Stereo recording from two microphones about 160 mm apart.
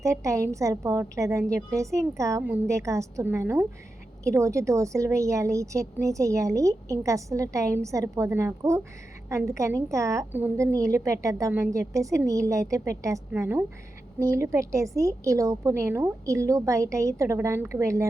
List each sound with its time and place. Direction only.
0.0 s a woman's voice: 20° right (ahead or behind)